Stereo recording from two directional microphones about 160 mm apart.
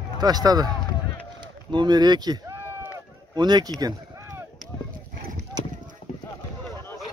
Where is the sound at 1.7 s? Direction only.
25° right (ahead or behind).